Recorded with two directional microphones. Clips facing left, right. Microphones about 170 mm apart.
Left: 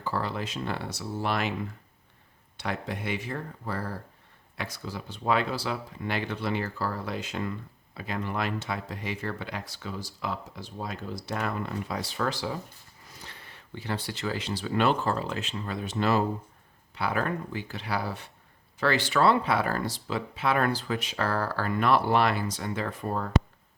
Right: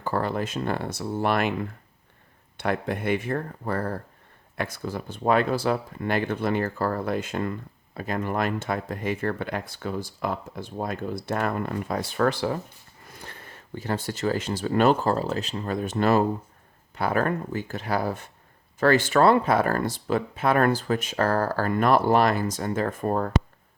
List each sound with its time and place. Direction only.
0.0 s speech: 50° right (ahead or behind)
2.6 s speech: 55° right (ahead or behind)